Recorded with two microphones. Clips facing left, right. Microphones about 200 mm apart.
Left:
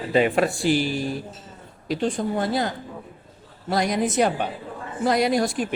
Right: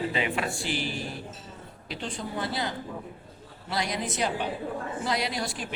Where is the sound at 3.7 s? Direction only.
50° left (ahead or behind).